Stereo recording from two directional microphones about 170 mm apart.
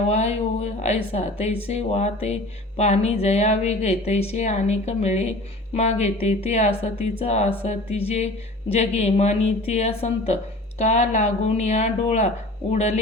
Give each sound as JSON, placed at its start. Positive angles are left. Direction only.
{"t": 0.1, "sound": "speech", "side_deg": 40}